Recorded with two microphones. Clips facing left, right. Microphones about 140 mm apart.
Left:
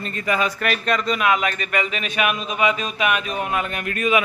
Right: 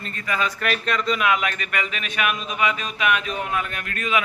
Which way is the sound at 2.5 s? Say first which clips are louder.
Left 3 dB; 30° left (ahead or behind).